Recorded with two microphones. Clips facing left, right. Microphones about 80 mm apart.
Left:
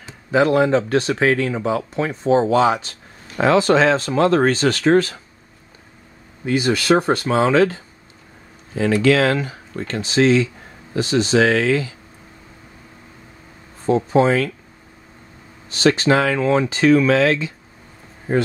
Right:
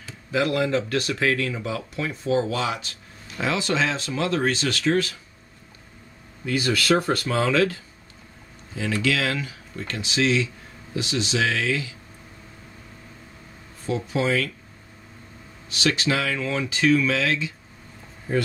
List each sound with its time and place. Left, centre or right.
0.0 s speech: left
6.4 s speech: left
13.8 s speech: left
15.7 s speech: left